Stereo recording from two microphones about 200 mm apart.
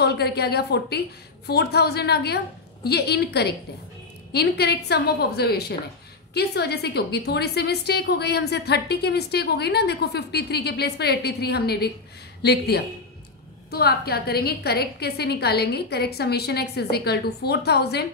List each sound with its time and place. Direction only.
0.0 s a woman's voice: 55° left (ahead or behind)